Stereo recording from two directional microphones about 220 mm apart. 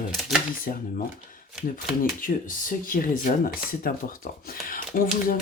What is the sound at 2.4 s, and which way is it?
Speech, 40° left (ahead or behind).